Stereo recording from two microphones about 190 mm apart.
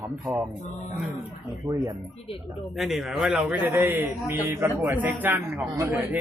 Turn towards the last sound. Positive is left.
turn(degrees=-10)  # may be behind; listen again after turning